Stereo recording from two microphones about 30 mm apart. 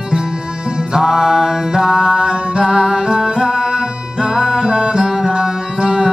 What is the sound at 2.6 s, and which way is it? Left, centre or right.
Music, centre.